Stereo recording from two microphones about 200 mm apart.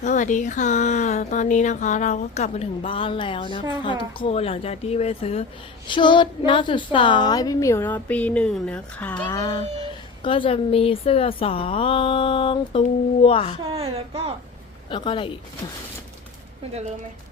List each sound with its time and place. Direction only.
0.0 s a woman's voice: 40° left (ahead or behind)
13.7 s a woman's voice: 30° right (ahead or behind)
14.8 s speech: 25° left (ahead or behind)